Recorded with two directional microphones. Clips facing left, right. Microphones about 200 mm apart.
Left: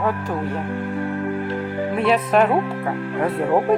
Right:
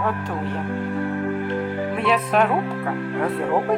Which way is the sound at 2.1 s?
Centre (ahead or behind).